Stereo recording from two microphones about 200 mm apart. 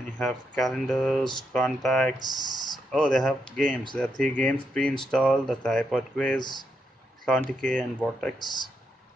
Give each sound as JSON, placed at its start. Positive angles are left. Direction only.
{"t": 0.2, "sound": "speech", "side_deg": 0}
{"t": 2.1, "sound": "speech", "side_deg": -20}
{"t": 2.9, "sound": "speech", "side_deg": 5}
{"t": 8.4, "sound": "speech", "side_deg": 20}